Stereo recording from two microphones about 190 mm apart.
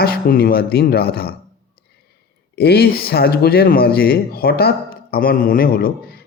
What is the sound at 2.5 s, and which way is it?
Speech, 55° left (ahead or behind).